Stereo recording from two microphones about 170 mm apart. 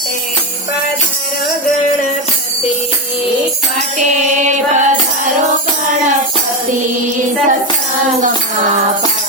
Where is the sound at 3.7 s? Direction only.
45° right (ahead or behind).